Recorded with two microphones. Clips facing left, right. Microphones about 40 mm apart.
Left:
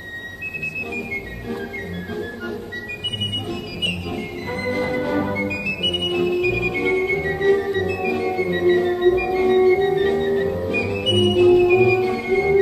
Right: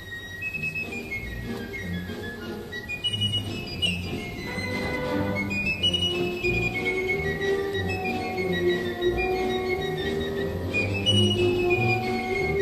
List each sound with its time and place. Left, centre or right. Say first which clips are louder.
4.9 s music: left 5 dB; centre